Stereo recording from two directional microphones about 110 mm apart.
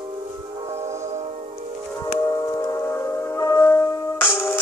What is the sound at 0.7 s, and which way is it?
Train, 90° right.